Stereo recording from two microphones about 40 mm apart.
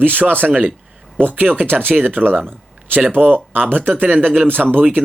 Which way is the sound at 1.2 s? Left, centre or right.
Right.